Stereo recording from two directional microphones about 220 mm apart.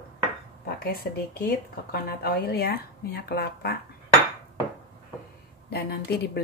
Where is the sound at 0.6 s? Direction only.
45° left (ahead or behind).